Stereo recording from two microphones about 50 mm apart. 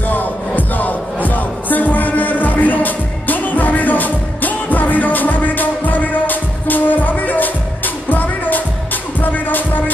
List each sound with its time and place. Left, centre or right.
0.1 s music: left